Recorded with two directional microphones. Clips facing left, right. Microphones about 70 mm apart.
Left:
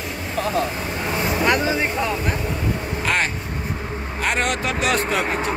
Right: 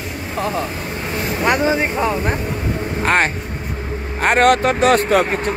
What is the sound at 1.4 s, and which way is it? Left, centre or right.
Speech, right.